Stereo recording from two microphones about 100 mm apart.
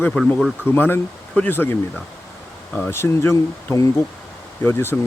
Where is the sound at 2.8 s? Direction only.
25° left (ahead or behind).